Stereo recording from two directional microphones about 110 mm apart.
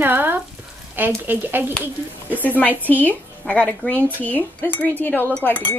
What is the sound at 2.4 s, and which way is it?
Speech, 15° left (ahead or behind).